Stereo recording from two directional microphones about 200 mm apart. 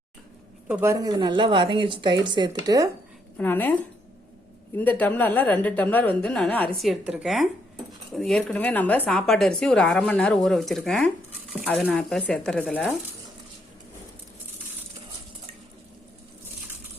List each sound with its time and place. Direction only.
0.7 s a woman's voice: 10° right (ahead or behind)
3.3 s a woman's voice: 10° left (ahead or behind)
4.8 s a woman's voice: 10° left (ahead or behind)